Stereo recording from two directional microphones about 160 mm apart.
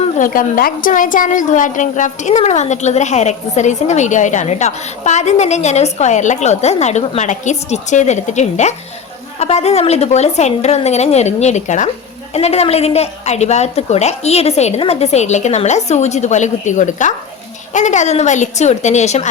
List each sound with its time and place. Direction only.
0.2 s a woman's voice: 60° left (ahead or behind)